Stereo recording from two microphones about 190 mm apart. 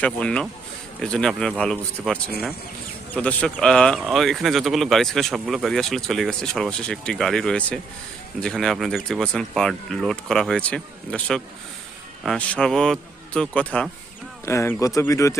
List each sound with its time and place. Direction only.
0.0 s speech: 5° left (ahead or behind)